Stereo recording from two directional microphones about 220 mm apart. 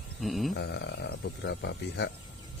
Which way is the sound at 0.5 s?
50° left (ahead or behind).